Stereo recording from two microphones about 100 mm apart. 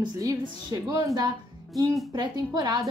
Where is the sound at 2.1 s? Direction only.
40° right (ahead or behind).